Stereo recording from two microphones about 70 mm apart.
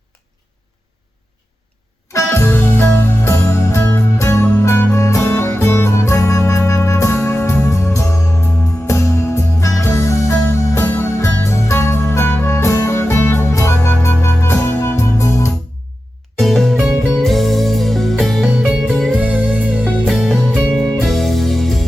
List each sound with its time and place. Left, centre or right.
2.1 s music: left
16.4 s music: centre
18.4 s music: centre
19.2 s music: right
20.1 s music: centre